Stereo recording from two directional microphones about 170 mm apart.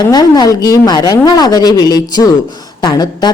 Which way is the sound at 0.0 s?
25° left (ahead or behind).